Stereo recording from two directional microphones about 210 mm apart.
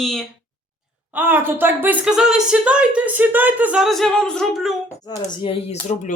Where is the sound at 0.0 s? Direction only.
Centre (ahead or behind).